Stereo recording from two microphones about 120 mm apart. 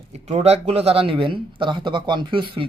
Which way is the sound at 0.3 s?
60° right (ahead or behind).